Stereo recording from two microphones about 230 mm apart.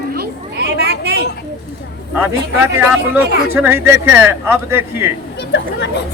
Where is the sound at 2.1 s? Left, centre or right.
Centre.